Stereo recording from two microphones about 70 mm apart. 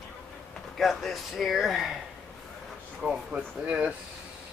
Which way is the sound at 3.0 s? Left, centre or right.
Centre.